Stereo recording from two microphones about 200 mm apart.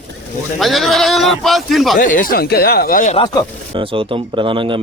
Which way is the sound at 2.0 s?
40° left (ahead or behind).